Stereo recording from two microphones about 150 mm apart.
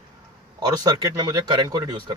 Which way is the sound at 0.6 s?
25° right (ahead or behind).